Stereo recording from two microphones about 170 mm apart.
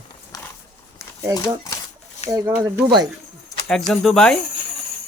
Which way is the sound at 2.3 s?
15° right (ahead or behind).